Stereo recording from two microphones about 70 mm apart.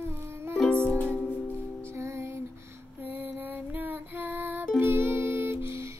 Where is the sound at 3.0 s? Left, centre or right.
Right.